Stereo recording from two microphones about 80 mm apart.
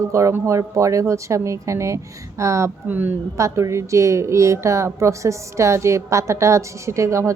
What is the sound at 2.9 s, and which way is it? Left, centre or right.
Speech, right.